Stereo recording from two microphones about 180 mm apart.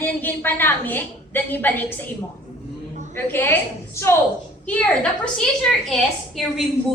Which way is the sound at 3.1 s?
10° left (ahead or behind).